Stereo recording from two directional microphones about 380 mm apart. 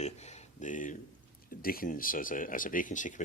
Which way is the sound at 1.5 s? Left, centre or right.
Left.